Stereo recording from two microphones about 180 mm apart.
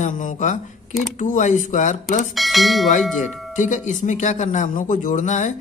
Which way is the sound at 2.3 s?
Centre (ahead or behind).